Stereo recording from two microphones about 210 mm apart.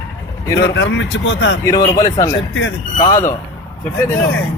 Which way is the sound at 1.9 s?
15° left (ahead or behind).